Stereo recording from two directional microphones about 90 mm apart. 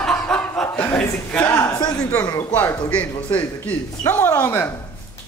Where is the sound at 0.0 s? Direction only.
10° left (ahead or behind).